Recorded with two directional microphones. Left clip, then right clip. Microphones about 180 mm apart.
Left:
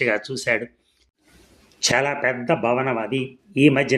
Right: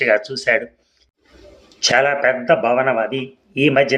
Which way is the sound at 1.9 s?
30° left (ahead or behind).